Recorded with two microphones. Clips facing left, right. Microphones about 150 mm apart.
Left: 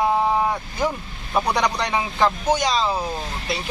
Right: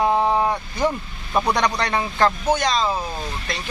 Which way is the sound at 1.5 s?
10° left (ahead or behind).